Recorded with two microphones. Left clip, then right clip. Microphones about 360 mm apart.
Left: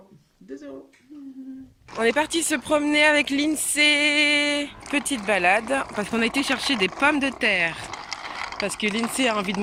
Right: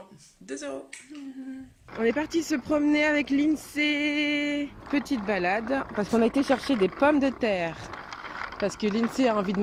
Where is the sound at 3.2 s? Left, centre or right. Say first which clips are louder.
Left 2 dB; left.